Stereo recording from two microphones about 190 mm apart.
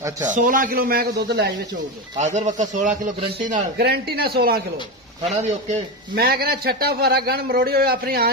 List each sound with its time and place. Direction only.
0.2 s speech: 40° right (ahead or behind); by 1.8 s 65° right (ahead or behind)
2.1 s a man's voice: 40° right (ahead or behind)
5.2 s speech: 40° right (ahead or behind)
6.1 s a man's voice: 55° right (ahead or behind)